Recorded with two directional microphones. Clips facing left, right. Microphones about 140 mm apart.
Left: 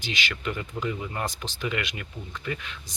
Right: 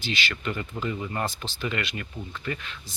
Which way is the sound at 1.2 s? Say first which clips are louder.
Even; 15° left (ahead or behind).